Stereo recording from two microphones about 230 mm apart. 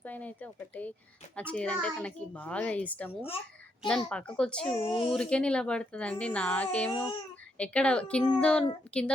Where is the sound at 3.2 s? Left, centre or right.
Left.